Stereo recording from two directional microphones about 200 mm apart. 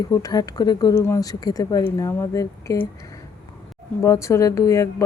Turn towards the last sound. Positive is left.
turn(degrees=15)  # may be behind; listen again after turning